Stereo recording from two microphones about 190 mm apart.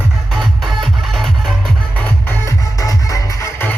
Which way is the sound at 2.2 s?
15° left (ahead or behind).